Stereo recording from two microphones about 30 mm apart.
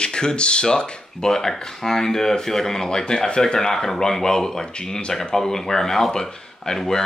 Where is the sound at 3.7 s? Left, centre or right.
Centre.